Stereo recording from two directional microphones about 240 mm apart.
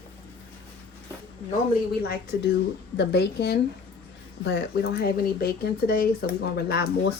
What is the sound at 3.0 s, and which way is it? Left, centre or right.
Speech, left.